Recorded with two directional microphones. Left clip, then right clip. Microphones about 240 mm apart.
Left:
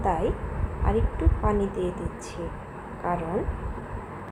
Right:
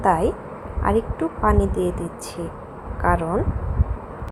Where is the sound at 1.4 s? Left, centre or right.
Right.